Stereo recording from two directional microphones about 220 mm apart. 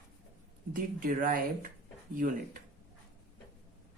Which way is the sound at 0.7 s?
40° right (ahead or behind).